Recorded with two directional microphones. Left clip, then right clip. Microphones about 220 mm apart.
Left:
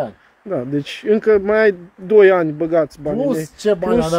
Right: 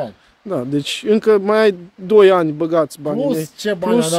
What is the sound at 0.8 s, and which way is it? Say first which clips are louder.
Speech: right 1 dB; 30° right (ahead or behind).